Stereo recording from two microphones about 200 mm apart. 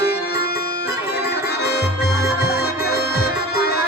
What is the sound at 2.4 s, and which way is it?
Music, 50° left (ahead or behind).